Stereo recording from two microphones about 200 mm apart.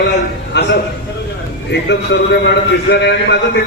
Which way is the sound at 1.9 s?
60° left (ahead or behind).